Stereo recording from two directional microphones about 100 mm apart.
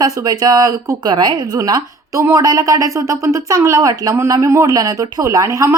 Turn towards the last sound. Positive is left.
turn(degrees=-35)  # may be behind; listen again after turning